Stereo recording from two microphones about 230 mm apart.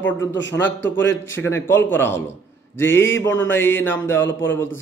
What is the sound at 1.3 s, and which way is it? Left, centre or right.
Mantra, centre.